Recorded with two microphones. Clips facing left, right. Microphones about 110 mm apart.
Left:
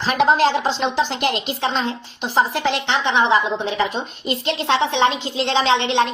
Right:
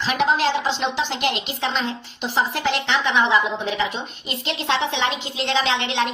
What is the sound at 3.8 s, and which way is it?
A woman's voice, 45° left (ahead or behind).